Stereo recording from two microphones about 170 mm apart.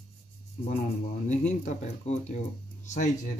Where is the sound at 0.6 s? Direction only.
45° left (ahead or behind).